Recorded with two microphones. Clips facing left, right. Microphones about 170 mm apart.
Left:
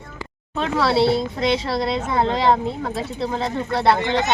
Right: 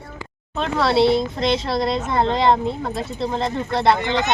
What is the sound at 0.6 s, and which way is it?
Speech, 5° left (ahead or behind).